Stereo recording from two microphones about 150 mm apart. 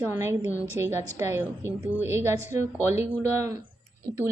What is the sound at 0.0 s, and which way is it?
Speech, 20° right (ahead or behind).